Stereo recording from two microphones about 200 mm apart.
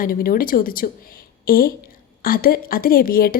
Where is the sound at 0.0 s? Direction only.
45° left (ahead or behind).